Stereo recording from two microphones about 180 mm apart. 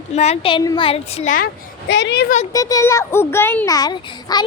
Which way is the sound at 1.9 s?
75° left (ahead or behind).